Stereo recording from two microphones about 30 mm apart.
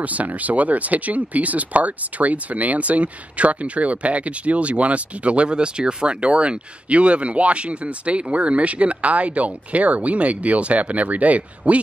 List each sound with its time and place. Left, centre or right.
0.0 s speech: right
6.2 s speech: right